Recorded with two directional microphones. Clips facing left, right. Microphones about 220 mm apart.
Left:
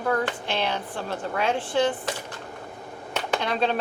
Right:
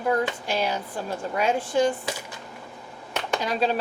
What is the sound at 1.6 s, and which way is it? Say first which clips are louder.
Speech: right 1 dB; 45° right (ahead or behind).